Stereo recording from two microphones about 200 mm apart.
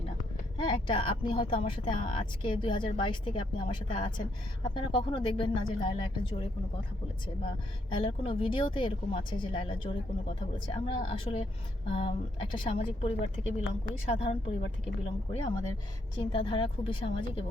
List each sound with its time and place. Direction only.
0.5 s a woman's voice: 25° left (ahead or behind)